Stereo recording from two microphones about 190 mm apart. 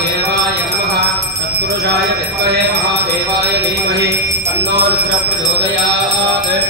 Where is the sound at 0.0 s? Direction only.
65° right (ahead or behind).